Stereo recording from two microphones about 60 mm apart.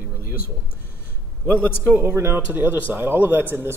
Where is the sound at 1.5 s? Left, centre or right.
Left.